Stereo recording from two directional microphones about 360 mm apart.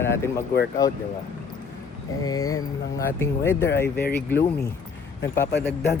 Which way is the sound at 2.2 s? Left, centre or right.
Centre.